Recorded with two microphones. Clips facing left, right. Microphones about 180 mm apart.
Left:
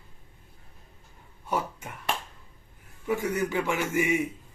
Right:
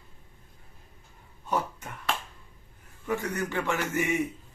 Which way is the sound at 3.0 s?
10° left (ahead or behind).